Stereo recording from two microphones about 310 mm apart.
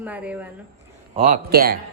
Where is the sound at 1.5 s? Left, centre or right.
Right.